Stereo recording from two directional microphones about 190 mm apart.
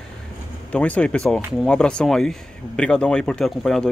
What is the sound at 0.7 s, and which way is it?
Speech, 5° left (ahead or behind).